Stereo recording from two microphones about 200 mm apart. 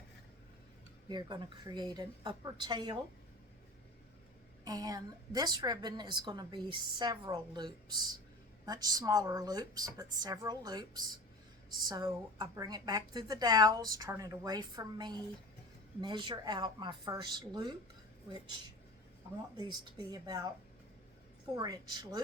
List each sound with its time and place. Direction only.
1.0 s a woman's voice: 20° right (ahead or behind)
4.6 s a woman's voice: 20° right (ahead or behind)
19.5 s a woman's voice: 20° right (ahead or behind)
21.5 s a woman's voice: 20° right (ahead or behind)